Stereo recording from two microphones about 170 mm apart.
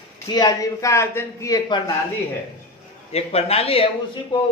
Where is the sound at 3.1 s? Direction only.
35° left (ahead or behind).